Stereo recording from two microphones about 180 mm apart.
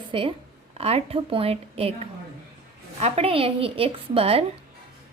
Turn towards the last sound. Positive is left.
turn(degrees=-30)  # may be behind; listen again after turning